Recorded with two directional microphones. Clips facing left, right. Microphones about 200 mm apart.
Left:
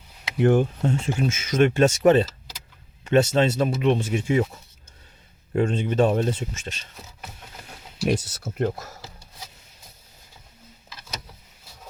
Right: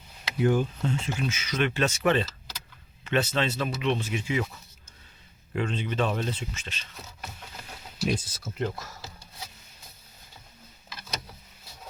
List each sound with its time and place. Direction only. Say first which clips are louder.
0.3 s speech: left 5 dB; 60° left (ahead or behind)
5.5 s speech: left 7 dB; 45° left (ahead or behind)
8.0 s speech: left 5 dB; 70° left (ahead or behind)
8.5 s speech: left 6 dB; 45° left (ahead or behind)